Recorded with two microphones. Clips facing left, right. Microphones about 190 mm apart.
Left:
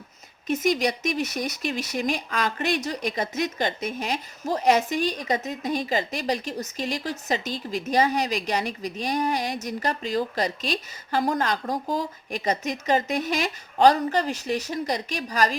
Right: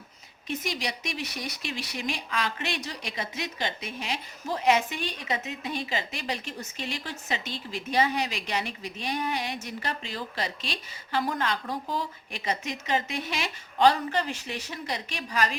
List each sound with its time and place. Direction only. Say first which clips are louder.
0.4 s speech: left 9 dB; 45° left (ahead or behind)